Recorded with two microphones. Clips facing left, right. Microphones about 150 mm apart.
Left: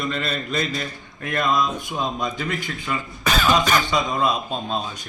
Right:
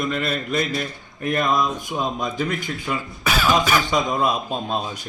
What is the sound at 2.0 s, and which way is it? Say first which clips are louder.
A man's voice: right 2 dB; 5° right (ahead or behind).